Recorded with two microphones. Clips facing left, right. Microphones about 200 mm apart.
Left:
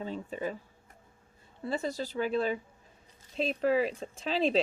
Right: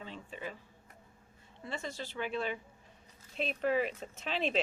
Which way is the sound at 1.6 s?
35° left (ahead or behind).